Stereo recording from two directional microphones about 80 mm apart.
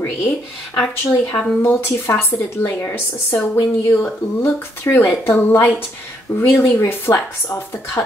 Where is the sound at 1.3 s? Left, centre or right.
Left.